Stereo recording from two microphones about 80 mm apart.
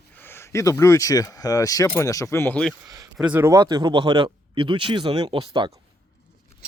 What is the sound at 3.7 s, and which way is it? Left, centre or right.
Speech, right.